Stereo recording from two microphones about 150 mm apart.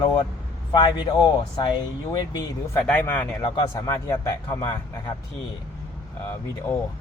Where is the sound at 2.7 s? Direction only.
15° left (ahead or behind).